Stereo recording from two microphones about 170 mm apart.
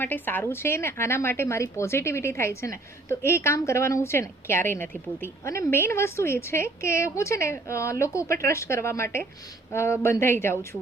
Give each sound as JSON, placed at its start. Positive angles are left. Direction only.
{"t": 0.0, "sound": "speech", "side_deg": 10}